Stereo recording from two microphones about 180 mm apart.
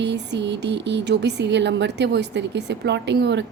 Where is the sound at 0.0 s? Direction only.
75° right (ahead or behind).